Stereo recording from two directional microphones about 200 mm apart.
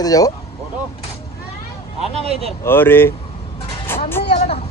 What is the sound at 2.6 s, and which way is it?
Speech, 10° left (ahead or behind).